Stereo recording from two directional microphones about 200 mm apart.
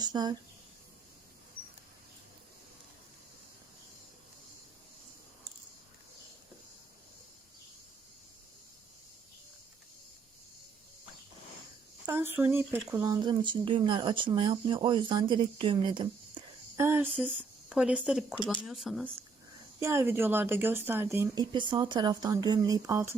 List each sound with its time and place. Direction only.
0.0 s speech: 20° right (ahead or behind)
12.0 s speech: 10° right (ahead or behind)
17.2 s speech: centre (ahead or behind)
19.8 s speech: 15° right (ahead or behind)
21.5 s speech: 25° right (ahead or behind)